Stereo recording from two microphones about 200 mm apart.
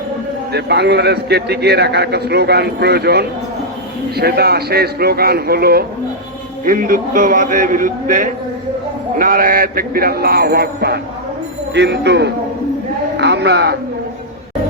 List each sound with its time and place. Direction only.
0.5 s a man's voice: 55° right (ahead or behind)